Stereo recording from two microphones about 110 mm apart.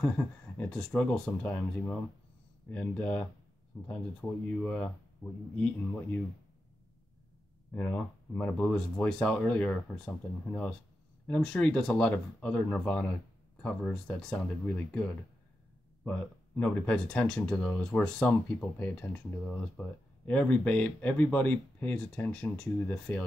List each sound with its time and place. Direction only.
0.0 s speech: 15° left (ahead or behind)
7.7 s speech: 15° left (ahead or behind)